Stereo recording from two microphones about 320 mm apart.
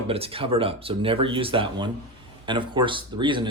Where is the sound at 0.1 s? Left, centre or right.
Centre.